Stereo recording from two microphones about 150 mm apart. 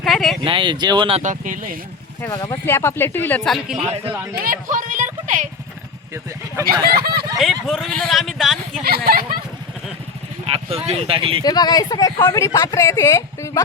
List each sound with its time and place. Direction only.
0.0 s a sound: centre (ahead or behind)
0.4 s speech: 35° right (ahead or behind)
1.2 s speech: 60° right (ahead or behind)
2.5 s speech: 15° left (ahead or behind)
3.4 s speech: centre (ahead or behind)
4.4 s a sound: 60° right (ahead or behind)
6.9 s speech: 90° right
7.3 s speech: centre (ahead or behind)
8.8 s a sound: 90° right
10.4 s speech: 40° right (ahead or behind)
11.4 s speech: 25° left (ahead or behind)